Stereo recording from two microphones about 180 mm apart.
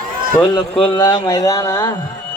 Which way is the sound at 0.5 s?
25° left (ahead or behind).